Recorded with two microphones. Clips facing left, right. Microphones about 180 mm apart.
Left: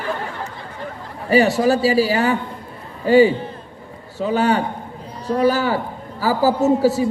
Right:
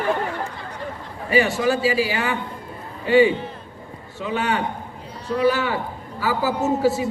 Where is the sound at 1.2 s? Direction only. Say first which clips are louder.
Left 4 dB; 40° left (ahead or behind).